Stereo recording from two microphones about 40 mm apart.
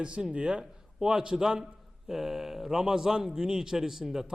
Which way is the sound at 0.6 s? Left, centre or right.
Centre.